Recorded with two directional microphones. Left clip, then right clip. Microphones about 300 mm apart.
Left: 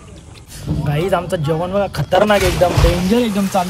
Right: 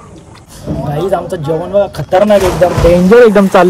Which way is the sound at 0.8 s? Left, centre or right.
Centre.